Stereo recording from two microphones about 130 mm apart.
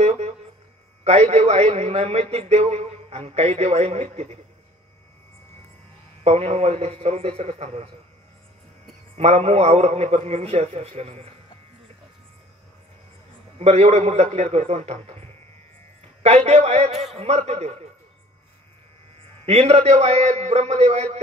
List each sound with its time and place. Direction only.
0.0 s a sound: 55° right (ahead or behind)
1.0 s a man's voice: 55° right (ahead or behind)
6.2 s a man's voice: 55° right (ahead or behind)
9.1 s a man's voice: 55° right (ahead or behind)
13.6 s a man's voice: 55° right (ahead or behind)
19.4 s a man's voice: 55° right (ahead or behind)